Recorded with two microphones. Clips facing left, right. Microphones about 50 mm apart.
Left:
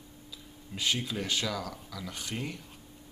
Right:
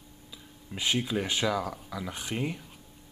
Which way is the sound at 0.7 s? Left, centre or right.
Centre.